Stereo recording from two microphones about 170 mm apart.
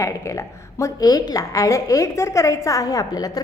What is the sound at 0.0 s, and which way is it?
A woman's voice, 15° left (ahead or behind).